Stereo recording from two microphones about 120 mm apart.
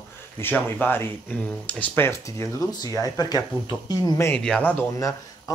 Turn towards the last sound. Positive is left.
turn(degrees=15)  # may be behind; listen again after turning